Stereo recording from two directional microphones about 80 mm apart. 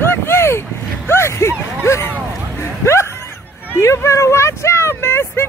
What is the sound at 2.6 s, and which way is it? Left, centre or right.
Bow-wow, left.